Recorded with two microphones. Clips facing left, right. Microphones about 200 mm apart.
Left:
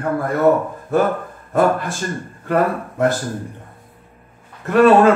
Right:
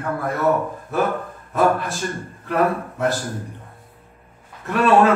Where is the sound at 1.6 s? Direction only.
Centre (ahead or behind).